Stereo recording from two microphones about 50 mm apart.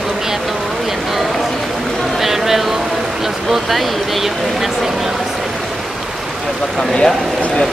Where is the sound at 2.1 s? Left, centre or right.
Centre.